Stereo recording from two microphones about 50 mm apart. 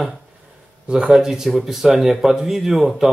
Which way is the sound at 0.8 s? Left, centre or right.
Centre.